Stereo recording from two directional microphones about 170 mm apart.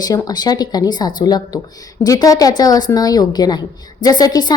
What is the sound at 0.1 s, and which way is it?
A woman's voice, 20° left (ahead or behind).